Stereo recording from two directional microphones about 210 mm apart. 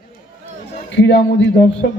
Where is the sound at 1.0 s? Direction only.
60° left (ahead or behind).